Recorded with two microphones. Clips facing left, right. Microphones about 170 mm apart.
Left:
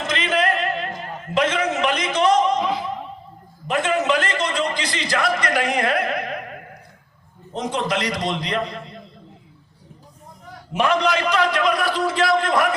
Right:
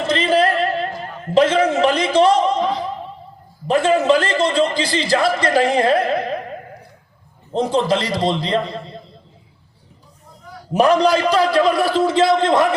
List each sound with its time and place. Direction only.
0.0 s a sound: 30° right (ahead or behind)
3.7 s a man's voice: 30° right (ahead or behind)
7.5 s a man's voice: 30° right (ahead or behind)
10.5 s a man's voice: 35° right (ahead or behind)